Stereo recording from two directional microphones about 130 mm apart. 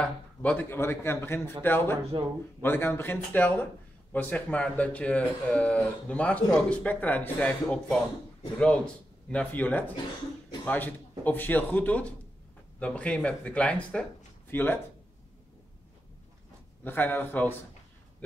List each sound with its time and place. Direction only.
0.0 s speech: 10° left (ahead or behind)
16.8 s speech: 15° left (ahead or behind)